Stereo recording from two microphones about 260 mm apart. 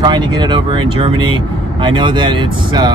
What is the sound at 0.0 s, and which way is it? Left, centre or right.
Speech, centre.